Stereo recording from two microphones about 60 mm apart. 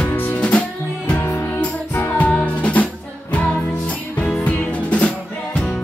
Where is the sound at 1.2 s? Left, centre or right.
Left.